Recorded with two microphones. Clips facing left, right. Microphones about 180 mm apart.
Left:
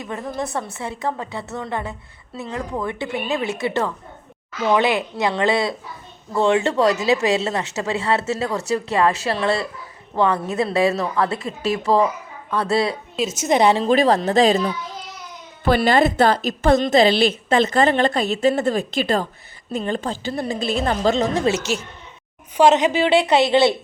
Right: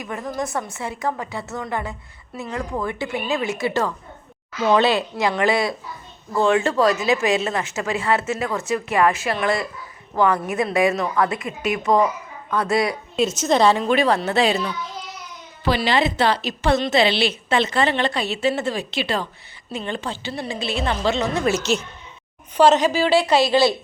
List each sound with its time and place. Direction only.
0.0 s a woman's voice: 25° left (ahead or behind)
13.2 s a woman's voice: centre (ahead or behind)
13.5 s a woman's voice: 15° left (ahead or behind)
13.7 s a woman's voice: 35° left (ahead or behind)
15.6 s a woman's voice: 50° left (ahead or behind)
22.5 s a woman's voice: 15° left (ahead or behind)